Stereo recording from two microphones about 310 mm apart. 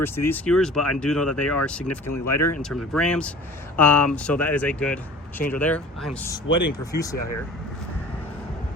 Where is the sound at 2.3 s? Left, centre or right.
Left.